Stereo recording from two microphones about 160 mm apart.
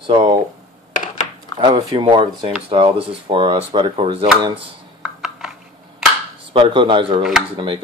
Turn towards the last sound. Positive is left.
turn(degrees=-30)  # may be behind; listen again after turning